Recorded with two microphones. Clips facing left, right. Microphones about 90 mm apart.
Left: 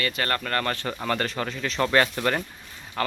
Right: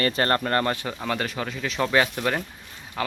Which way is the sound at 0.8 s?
5° right (ahead or behind).